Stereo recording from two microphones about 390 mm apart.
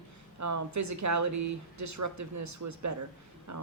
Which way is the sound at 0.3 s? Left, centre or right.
Right.